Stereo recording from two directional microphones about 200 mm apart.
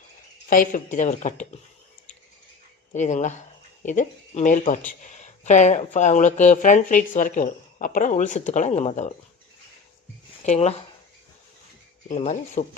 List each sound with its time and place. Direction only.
0.5 s speech: 40° left (ahead or behind)
2.9 s speech: 35° left (ahead or behind)
10.4 s speech: 35° left (ahead or behind)
12.0 s speech: 35° left (ahead or behind)